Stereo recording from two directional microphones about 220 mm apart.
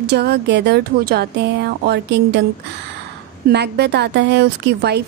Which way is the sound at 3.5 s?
50° right (ahead or behind).